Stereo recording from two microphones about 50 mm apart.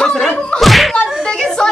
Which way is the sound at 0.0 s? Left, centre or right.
Centre.